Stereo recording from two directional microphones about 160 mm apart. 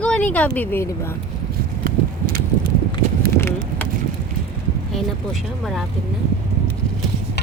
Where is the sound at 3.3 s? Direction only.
15° left (ahead or behind).